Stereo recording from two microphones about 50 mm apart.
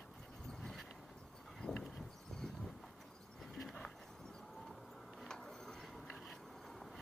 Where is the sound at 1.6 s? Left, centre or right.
Left.